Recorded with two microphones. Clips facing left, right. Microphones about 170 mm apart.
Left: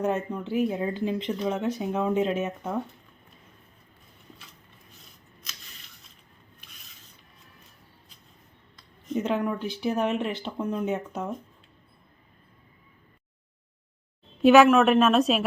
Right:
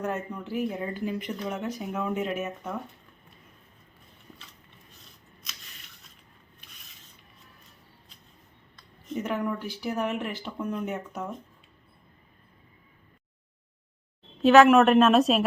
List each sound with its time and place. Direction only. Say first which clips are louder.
0.0 s speech: left 5 dB; 20° left (ahead or behind)
9.2 s speech: left 2 dB; 20° left (ahead or behind)
14.4 s a woman's voice: even; 10° left (ahead or behind)